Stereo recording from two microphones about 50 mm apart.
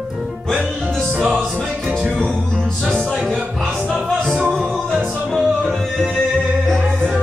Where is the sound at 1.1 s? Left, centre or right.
Right.